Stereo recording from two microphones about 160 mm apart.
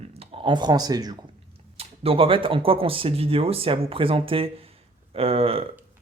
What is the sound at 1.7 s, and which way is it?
Speech, 35° right (ahead or behind).